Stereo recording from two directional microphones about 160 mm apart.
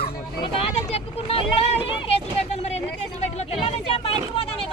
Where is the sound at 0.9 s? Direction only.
35° left (ahead or behind).